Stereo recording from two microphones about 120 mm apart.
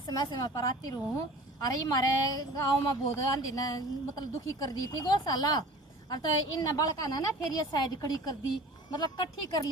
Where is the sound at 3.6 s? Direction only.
30° left (ahead or behind).